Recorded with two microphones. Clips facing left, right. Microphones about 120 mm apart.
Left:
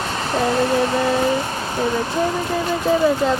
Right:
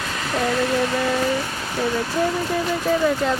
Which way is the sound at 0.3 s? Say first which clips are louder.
Left 3 dB; 30° left (ahead or behind).